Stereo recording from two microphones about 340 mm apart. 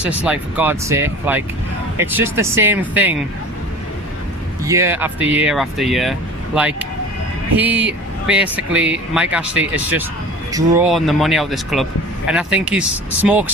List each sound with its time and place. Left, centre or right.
0.0 s speech: centre
4.6 s speech: centre